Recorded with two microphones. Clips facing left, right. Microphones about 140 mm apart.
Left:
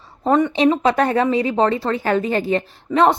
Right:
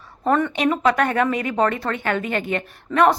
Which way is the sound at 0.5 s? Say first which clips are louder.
Left 3 dB; 30° left (ahead or behind).